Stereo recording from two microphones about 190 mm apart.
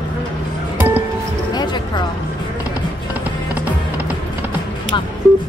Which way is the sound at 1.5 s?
25° left (ahead or behind).